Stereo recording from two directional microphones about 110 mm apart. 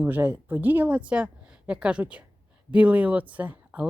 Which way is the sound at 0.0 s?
20° right (ahead or behind).